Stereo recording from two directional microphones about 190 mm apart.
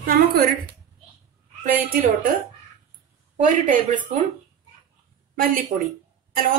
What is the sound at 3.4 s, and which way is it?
Speech, 45° right (ahead or behind).